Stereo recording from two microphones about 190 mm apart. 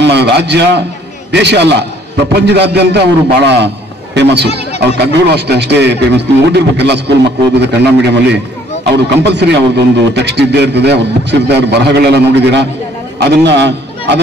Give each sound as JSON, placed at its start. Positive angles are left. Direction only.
{"t": 0.0, "sound": "a man's voice", "side_deg": -65}